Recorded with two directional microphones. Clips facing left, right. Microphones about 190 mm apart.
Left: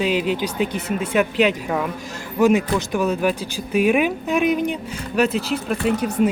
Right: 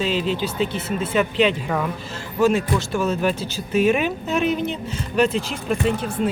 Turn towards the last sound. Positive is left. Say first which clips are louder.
# left 1 dB
turn(degrees=10)  # may be behind; listen again after turning